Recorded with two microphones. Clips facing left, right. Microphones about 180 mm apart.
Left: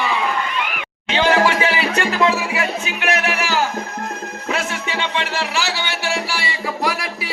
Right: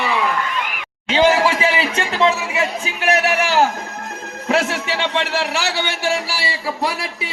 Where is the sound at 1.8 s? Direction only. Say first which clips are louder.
Even; 25° right (ahead or behind).